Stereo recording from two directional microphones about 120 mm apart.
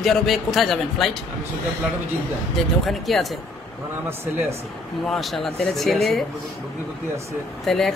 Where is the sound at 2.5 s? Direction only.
Centre (ahead or behind).